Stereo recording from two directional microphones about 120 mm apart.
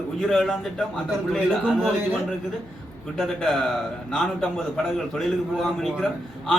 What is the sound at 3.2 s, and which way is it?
A man's voice, 5° left (ahead or behind).